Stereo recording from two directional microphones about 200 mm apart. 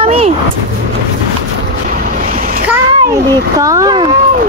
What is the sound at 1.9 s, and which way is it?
Boat, 40° right (ahead or behind).